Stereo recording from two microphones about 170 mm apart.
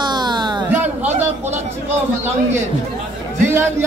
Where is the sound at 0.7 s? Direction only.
10° right (ahead or behind).